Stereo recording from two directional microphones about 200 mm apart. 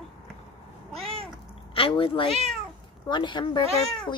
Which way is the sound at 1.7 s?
25° left (ahead or behind).